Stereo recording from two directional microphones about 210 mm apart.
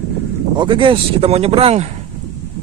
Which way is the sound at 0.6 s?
25° right (ahead or behind).